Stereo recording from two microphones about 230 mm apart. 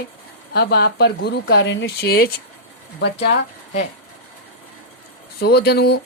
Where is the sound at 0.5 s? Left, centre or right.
Left.